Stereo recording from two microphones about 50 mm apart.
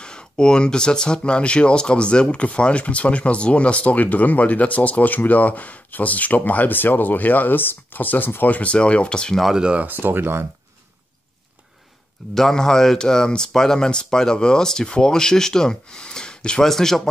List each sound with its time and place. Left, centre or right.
0.0 s speech: centre
9.6 s speech: right
9.8 s speech: right
12.4 s speech: centre
16.6 s speech: centre